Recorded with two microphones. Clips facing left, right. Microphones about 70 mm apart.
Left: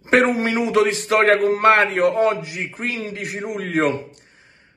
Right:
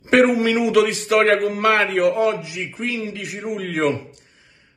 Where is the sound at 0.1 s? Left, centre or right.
Left.